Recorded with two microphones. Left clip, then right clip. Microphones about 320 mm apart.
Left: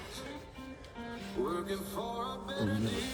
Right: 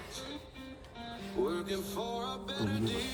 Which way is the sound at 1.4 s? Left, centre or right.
Centre.